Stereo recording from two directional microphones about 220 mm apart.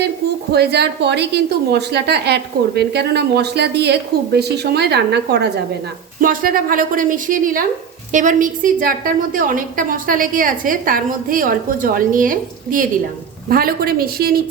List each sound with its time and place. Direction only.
0.5 s a woman's voice: 50° right (ahead or behind)